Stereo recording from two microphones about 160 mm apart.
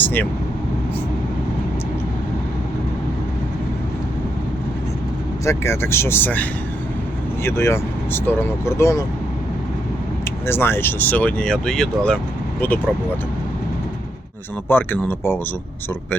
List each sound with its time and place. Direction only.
0.0 s speech: 10° left (ahead or behind)
5.5 s speech: 15° left (ahead or behind)
10.2 s speech: 15° left (ahead or behind)
14.7 s speech: 15° left (ahead or behind)